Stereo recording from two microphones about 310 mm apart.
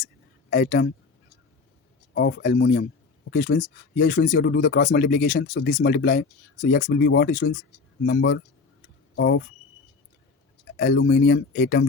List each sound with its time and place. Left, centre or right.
0.5 s speech: left
2.1 s speech: left
10.8 s speech: left